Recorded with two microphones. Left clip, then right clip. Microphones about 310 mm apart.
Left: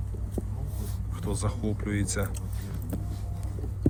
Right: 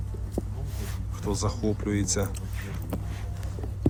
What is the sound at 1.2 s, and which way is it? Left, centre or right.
Speech, centre.